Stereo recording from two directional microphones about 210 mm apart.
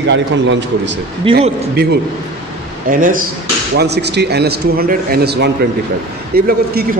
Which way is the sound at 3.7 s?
50° right (ahead or behind).